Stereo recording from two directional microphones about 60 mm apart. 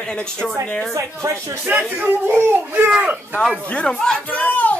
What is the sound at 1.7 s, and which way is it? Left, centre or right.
Speech, right.